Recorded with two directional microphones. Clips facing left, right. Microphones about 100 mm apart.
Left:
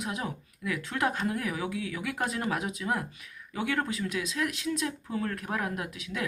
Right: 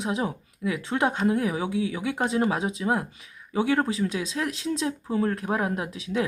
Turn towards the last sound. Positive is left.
turn(degrees=-30)  # may be behind; listen again after turning